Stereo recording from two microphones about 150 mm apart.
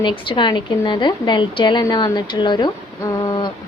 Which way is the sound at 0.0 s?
30° left (ahead or behind).